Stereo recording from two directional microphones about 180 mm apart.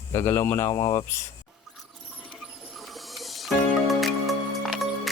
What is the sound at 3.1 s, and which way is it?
Music, centre (ahead or behind).